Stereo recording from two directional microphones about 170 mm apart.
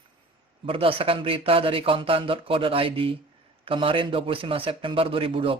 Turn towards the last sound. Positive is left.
turn(degrees=-30)  # may be behind; listen again after turning